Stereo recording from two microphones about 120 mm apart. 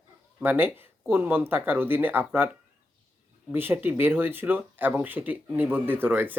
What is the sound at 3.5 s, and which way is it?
Speech, 15° right (ahead or behind).